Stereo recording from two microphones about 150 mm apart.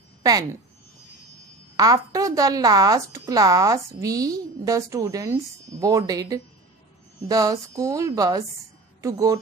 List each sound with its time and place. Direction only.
0.2 s speech: 25° right (ahead or behind)
1.8 s speech: 25° right (ahead or behind)